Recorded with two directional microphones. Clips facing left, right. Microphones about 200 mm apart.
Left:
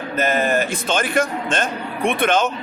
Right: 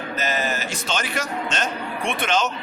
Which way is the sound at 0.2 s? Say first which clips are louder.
Left 8 dB; 55° left (ahead or behind).